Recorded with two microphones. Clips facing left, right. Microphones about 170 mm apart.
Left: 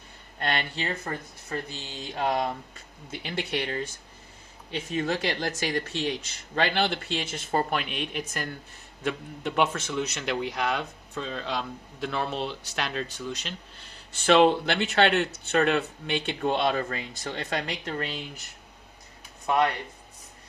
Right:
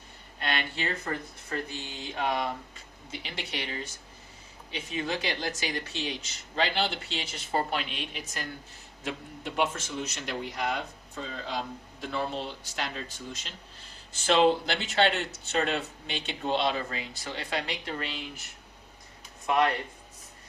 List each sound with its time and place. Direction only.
0.3 s speech: 45° left (ahead or behind)
2.1 s a man's voice: 45° left (ahead or behind)